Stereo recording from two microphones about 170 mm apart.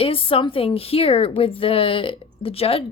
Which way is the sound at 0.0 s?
30° left (ahead or behind).